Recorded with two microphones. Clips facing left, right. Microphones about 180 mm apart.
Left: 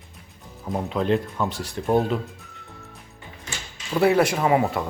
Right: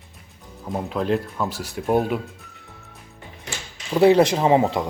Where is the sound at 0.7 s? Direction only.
Centre (ahead or behind).